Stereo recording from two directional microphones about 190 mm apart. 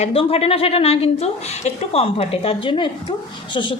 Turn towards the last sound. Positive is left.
turn(degrees=25)  # may be behind; listen again after turning